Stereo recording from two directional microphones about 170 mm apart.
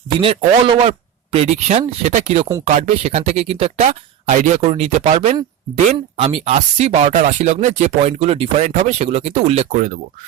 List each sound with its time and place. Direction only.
0.2 s speech: 30° right (ahead or behind)
9.7 s speech: 50° right (ahead or behind)